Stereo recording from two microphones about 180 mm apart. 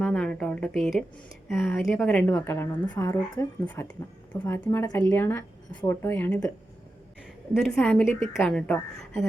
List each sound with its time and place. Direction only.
0.0 s speech: 5° left (ahead or behind)
7.5 s a woman's voice: 5° left (ahead or behind)